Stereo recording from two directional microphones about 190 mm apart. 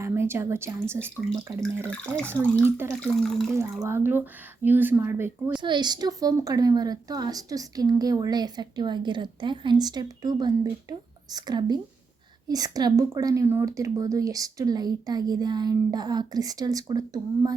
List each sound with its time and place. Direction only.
0.0 s speech: 15° right (ahead or behind)
1.9 s speech: 5° left (ahead or behind)
2.3 s speech: 10° right (ahead or behind)
3.0 s speech: centre (ahead or behind)
3.8 s speech: 10° right (ahead or behind)
5.6 s a woman's voice: 25° right (ahead or behind)